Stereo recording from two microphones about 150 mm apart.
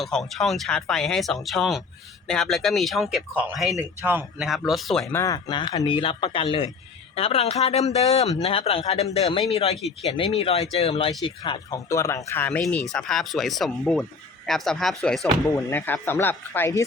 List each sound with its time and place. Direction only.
0.0 s speech: centre (ahead or behind)
4.4 s speech: centre (ahead or behind)
5.1 s speech: 20° left (ahead or behind)
11.9 s speech: 20° left (ahead or behind)